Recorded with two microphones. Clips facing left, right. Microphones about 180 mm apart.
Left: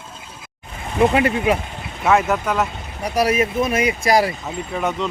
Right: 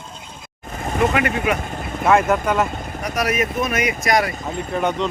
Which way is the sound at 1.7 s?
50° right (ahead or behind).